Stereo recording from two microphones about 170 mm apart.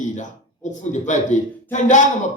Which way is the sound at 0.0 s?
45° left (ahead or behind).